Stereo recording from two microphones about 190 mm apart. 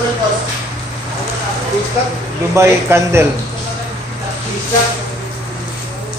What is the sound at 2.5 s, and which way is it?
Speech, 15° right (ahead or behind).